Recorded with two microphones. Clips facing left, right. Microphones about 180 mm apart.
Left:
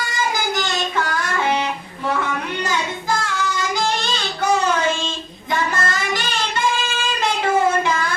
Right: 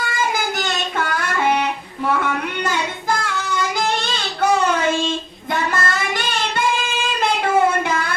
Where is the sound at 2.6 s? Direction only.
55° right (ahead or behind).